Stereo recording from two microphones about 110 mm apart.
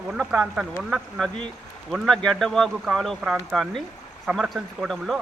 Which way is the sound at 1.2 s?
10° left (ahead or behind).